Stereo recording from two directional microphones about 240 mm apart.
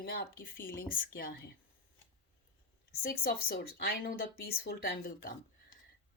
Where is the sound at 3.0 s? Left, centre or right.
Left.